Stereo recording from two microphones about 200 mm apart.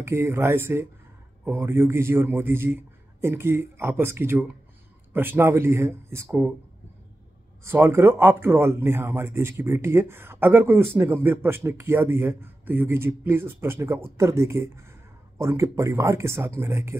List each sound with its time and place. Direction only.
0.0 s speech: 10° right (ahead or behind)
7.6 s speech: 10° right (ahead or behind)